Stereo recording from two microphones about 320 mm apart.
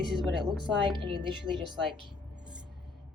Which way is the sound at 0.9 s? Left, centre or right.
Centre.